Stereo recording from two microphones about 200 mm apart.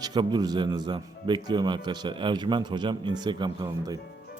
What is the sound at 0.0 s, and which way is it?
A man's voice, 20° right (ahead or behind).